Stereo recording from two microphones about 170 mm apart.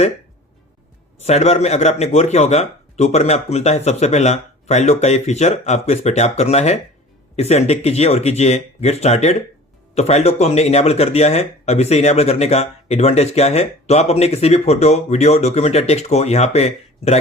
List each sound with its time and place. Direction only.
1.2 s speech: 40° left (ahead or behind)